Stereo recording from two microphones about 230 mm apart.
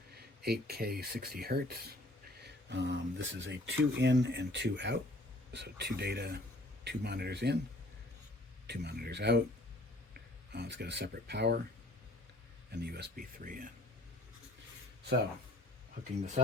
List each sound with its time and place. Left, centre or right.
0.2 s speech: right
8.6 s speech: right
12.7 s speech: right